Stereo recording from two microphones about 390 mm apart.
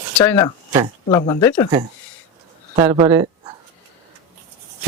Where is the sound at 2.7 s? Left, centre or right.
Centre.